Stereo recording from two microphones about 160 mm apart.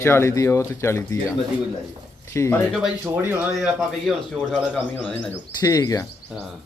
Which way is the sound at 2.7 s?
5° right (ahead or behind).